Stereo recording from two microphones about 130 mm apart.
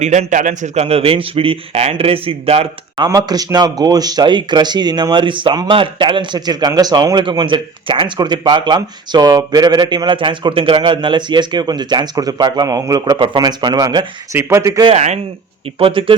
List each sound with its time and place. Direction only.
0.0 s a man's voice: 65° right (ahead or behind); by 3.1 s 45° right (ahead or behind)
3.1 s speech: 30° right (ahead or behind)
13.1 s speech: 40° right (ahead or behind); by 14.8 s 25° right (ahead or behind)
14.9 s a man's voice: 60° right (ahead or behind)
15.8 s a man's voice: 45° right (ahead or behind)